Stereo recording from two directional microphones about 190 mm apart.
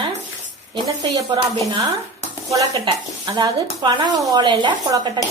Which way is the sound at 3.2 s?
25° right (ahead or behind).